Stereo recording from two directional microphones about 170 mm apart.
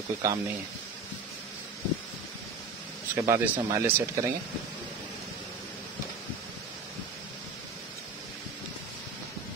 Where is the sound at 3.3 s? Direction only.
15° right (ahead or behind).